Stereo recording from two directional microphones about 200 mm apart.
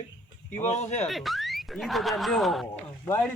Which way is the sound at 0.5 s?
35° left (ahead or behind).